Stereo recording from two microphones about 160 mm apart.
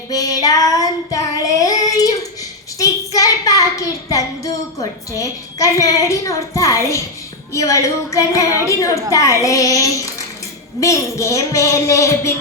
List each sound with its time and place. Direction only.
0.1 s child singing: 20° left (ahead or behind)
7.5 s speech: 20° left (ahead or behind)